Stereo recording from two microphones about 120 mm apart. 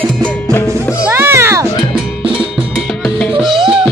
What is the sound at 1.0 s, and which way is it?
Music, 20° right (ahead or behind).